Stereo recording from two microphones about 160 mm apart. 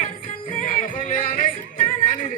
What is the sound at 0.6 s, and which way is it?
Music, 55° left (ahead or behind).